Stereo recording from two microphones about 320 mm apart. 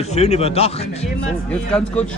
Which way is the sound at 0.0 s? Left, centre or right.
Centre.